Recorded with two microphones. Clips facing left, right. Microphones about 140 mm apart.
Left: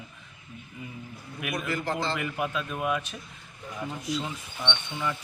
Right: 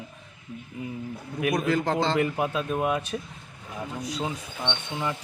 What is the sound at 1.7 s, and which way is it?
Speech, 90° right.